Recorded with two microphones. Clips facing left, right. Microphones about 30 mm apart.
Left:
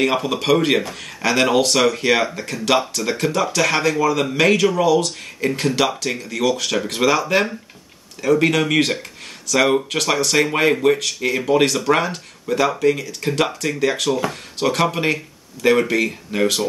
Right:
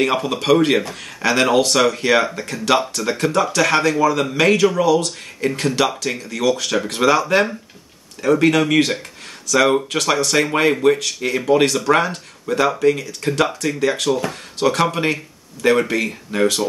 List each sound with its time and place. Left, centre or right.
0.0 s speech: centre
8.4 s speech: centre